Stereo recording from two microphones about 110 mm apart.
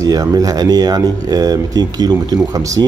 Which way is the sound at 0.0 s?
35° right (ahead or behind).